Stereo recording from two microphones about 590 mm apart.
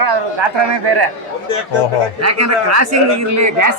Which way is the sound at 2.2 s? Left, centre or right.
Right.